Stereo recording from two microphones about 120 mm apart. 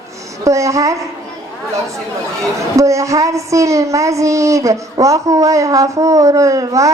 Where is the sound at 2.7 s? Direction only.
25° right (ahead or behind).